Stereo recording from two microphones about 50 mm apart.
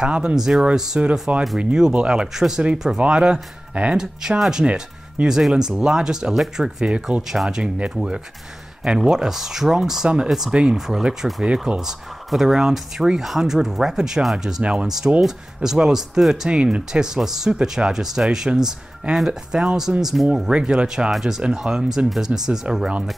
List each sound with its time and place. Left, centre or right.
0.1 s speech: right
1.3 s speech: right
1.6 s speech: centre
16.4 s speech: right